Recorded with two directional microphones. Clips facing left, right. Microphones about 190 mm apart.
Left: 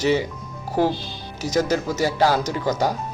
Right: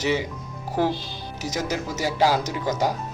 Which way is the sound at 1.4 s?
20° right (ahead or behind).